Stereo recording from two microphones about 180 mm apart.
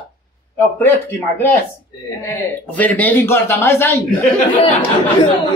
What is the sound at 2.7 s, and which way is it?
Speech, 10° left (ahead or behind).